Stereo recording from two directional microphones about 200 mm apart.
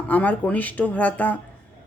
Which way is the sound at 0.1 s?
10° left (ahead or behind).